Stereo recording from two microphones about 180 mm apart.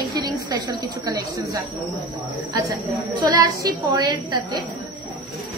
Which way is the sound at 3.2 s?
20° right (ahead or behind).